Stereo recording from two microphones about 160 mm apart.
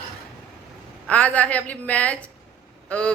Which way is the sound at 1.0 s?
10° left (ahead or behind).